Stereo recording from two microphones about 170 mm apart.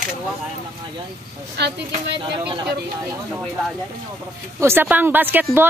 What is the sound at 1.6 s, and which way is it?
Speech, 75° right (ahead or behind).